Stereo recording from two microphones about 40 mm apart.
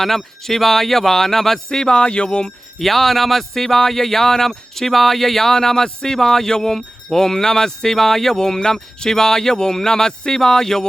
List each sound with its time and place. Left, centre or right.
0.0 s speech: centre
1.7 s speech: left
2.7 s speech: centre